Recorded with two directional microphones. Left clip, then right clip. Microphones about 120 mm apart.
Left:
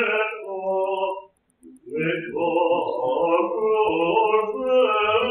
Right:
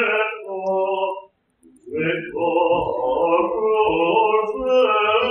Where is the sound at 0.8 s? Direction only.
35° left (ahead or behind).